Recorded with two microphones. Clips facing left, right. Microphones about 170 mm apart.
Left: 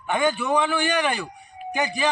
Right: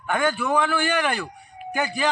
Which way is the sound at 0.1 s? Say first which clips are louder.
Left 1 dB; 15° left (ahead or behind).